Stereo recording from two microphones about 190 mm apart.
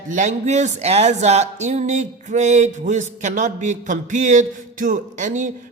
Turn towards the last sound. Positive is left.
turn(degrees=-40)  # may be behind; listen again after turning